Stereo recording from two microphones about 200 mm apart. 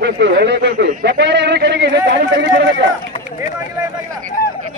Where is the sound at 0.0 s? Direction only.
55° right (ahead or behind).